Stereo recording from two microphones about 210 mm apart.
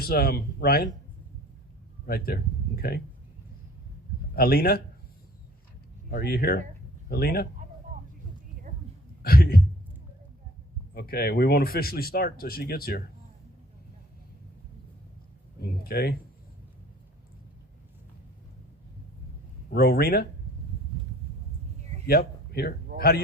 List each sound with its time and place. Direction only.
0.0 s speech: 45° left (ahead or behind)
2.0 s speech: 45° left (ahead or behind)
4.4 s speech: 45° left (ahead or behind)
6.1 s speech: 45° left (ahead or behind)
9.2 s speech: 45° left (ahead or behind)
10.9 s speech: 45° left (ahead or behind)
15.8 s speech: 45° left (ahead or behind)
19.7 s speech: 45° left (ahead or behind)
22.0 s speech: 45° left (ahead or behind)